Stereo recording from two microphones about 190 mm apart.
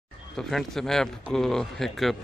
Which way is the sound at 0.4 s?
Centre (ahead or behind).